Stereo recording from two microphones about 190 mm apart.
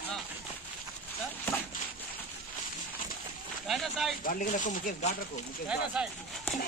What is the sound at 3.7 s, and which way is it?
Speech, centre (ahead or behind).